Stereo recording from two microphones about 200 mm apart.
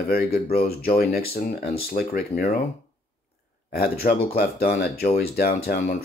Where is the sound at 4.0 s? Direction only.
35° left (ahead or behind).